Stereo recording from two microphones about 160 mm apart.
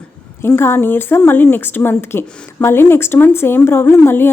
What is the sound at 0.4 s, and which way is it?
A woman's voice, 15° left (ahead or behind).